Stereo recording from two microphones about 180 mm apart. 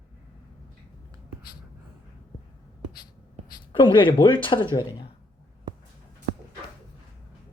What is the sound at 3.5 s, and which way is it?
Speech, 25° left (ahead or behind).